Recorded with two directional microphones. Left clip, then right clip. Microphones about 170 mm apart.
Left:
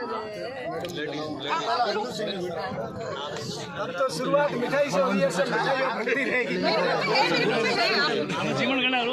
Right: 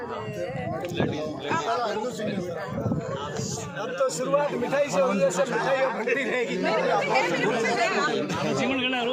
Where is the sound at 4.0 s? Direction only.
60° right (ahead or behind).